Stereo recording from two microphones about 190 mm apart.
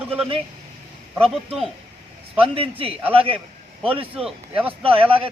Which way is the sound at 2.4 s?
30° right (ahead or behind).